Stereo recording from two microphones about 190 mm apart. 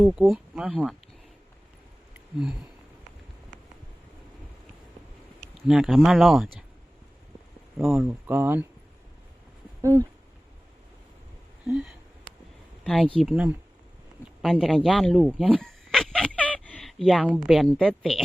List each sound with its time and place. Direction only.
0.0 s speech: 5° right (ahead or behind)
2.1 s a sound: 5° right (ahead or behind)
5.6 s speech: centre (ahead or behind)
7.8 s speech: centre (ahead or behind)
9.8 s speech: 15° right (ahead or behind)
12.8 s speech: centre (ahead or behind)